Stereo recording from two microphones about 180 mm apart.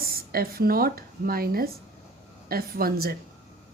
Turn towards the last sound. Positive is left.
turn(degrees=-55)  # may be behind; listen again after turning